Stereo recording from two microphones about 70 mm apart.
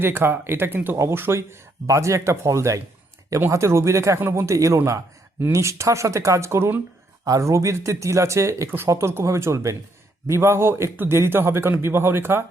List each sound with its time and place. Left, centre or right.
0.0 s a man's voice: right